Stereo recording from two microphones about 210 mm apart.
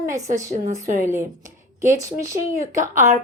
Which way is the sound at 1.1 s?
15° right (ahead or behind).